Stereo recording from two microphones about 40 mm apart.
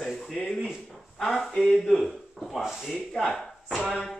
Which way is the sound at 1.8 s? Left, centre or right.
Centre.